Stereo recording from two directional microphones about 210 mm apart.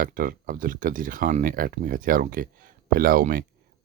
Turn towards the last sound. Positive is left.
turn(degrees=-45)  # may be behind; listen again after turning